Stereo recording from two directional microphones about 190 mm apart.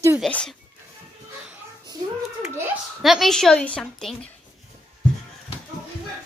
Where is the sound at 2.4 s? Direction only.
5° right (ahead or behind).